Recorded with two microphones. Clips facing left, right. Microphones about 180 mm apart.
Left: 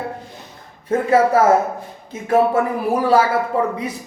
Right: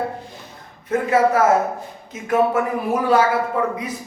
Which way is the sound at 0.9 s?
30° left (ahead or behind).